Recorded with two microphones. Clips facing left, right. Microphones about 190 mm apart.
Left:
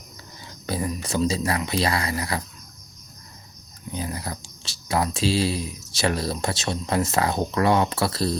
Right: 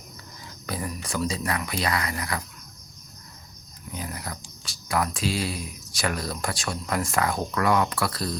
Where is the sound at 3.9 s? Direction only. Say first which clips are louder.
Left 4 dB; 30° left (ahead or behind).